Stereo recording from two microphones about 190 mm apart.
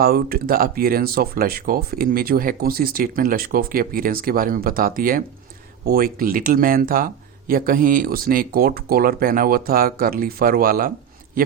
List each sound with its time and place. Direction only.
0.0 s speech: 50° right (ahead or behind)